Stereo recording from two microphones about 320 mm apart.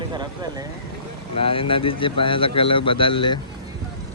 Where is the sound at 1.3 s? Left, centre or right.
Centre.